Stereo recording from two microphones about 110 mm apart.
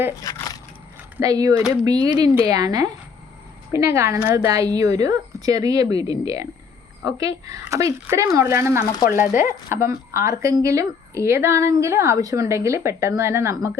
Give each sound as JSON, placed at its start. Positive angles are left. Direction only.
{"t": 0.3, "sound": "speech", "side_deg": 30}
{"t": 1.2, "sound": "a woman's voice", "side_deg": -35}